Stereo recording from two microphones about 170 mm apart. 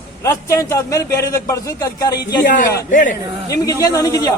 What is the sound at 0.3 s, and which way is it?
A man's voice, 20° left (ahead or behind).